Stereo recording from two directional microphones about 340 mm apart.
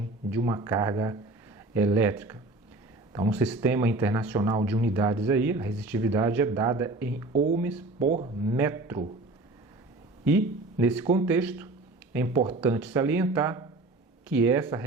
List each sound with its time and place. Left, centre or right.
0.3 s speech: centre
8.0 s speech: centre
10.2 s speech: centre